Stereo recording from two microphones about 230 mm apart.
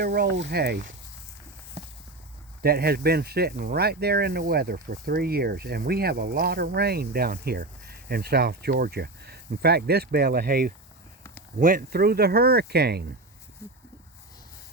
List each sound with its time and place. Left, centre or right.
0.0 s speech: right
2.6 s speech: right
13.6 s a sound: centre